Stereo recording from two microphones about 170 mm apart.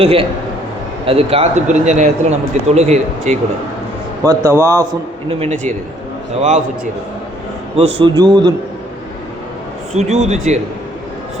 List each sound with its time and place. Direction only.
0.0 s speech: 35° right (ahead or behind)
4.2 s speech: 15° right (ahead or behind)
5.3 s speech: 40° right (ahead or behind)
7.8 s speech: 35° right (ahead or behind)
8.1 s a man's voice: 25° right (ahead or behind)
9.9 s speech: 40° right (ahead or behind)